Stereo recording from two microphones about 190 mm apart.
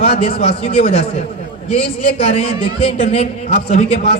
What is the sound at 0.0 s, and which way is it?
A man's voice, 30° left (ahead or behind).